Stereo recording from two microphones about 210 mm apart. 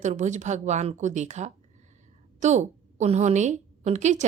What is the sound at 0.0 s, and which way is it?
Speech, 35° right (ahead or behind).